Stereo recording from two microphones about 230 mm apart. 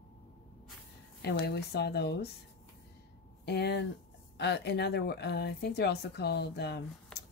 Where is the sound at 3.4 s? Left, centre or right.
Left.